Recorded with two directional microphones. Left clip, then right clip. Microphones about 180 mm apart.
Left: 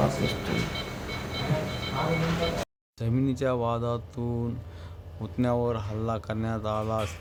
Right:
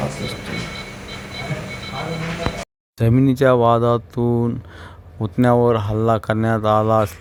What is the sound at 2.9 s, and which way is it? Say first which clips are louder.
Speech: right 12 dB; 50° right (ahead or behind).